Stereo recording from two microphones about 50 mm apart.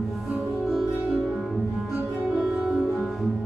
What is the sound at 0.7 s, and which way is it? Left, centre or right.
Music, centre.